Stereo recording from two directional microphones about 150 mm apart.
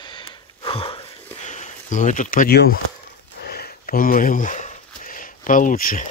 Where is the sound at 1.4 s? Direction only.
50° left (ahead or behind).